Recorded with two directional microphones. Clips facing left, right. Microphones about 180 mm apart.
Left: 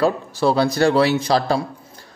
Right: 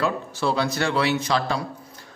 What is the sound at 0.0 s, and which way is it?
A man's voice, 35° left (ahead or behind).